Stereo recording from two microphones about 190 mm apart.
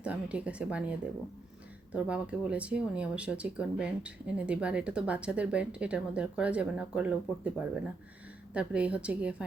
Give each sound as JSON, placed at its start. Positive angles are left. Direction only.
{"t": 0.0, "sound": "a woman's voice", "side_deg": -5}